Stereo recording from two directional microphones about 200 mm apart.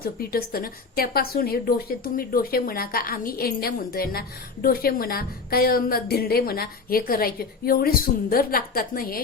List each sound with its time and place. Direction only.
0.0 s a woman's voice: 50° left (ahead or behind)